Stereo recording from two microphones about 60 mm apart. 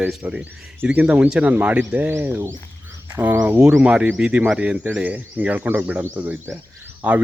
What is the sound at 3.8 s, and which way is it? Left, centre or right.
Speech, centre.